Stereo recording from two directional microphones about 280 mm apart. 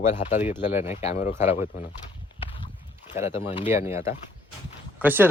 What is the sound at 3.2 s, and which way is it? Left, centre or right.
Speech, centre.